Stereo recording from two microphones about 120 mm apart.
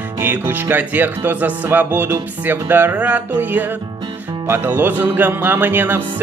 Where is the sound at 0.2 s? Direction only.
15° right (ahead or behind).